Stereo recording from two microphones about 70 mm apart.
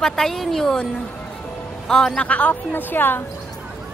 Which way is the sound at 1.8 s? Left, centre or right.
Centre.